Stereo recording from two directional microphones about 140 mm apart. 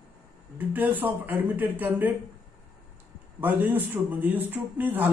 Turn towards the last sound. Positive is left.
turn(degrees=-15)  # may be behind; listen again after turning